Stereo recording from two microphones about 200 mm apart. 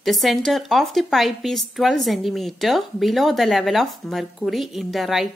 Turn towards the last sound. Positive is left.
turn(degrees=0)  # may be behind; listen again after turning